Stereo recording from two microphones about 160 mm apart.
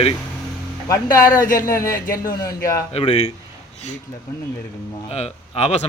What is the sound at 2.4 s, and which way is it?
Speech, 20° left (ahead or behind).